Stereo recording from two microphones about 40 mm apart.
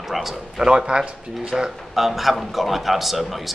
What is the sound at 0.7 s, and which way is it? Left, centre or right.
Speech, right.